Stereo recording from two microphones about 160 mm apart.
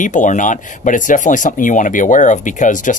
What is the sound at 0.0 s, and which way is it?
Speech, 50° left (ahead or behind).